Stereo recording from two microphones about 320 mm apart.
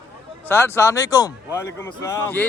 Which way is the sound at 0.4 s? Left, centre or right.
Centre.